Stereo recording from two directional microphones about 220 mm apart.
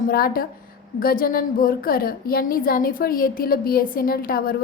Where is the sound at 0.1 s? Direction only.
40° left (ahead or behind).